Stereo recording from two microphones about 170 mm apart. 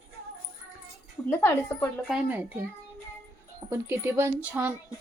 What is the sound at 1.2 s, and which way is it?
Speech, 10° left (ahead or behind).